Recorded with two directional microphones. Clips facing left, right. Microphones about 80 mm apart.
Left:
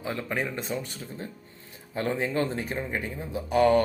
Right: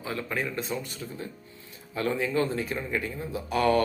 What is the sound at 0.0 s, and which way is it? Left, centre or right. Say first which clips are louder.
Speech: left 1 dB; left.